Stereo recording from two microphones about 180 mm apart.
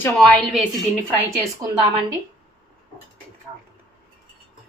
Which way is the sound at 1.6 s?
25° right (ahead or behind).